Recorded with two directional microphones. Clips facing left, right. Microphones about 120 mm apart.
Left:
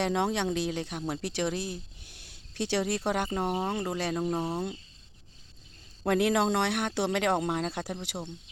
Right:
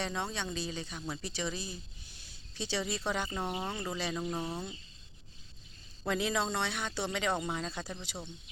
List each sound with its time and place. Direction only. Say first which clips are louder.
0.0 s speech: left 9 dB; 80° left; by 4.2 s 55° left (ahead or behind)
4.2 s speech: left 6 dB; 35° left (ahead or behind)
6.1 s speech: left 7 dB; 70° left (ahead or behind)